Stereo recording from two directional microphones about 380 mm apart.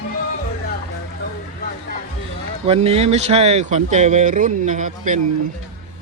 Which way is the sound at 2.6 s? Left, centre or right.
Centre.